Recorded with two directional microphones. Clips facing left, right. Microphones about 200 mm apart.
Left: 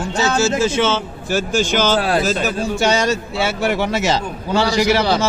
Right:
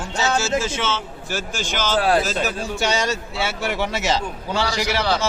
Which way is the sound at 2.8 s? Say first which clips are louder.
Left 5 dB; 50° left (ahead or behind).